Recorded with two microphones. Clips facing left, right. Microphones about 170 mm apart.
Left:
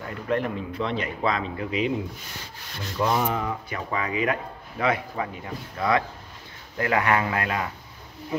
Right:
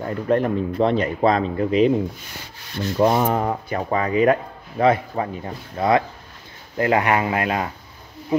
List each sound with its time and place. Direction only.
0.0 s speech: 40° right (ahead or behind)
3.0 s speech: 45° right (ahead or behind); by 7.6 s 20° right (ahead or behind)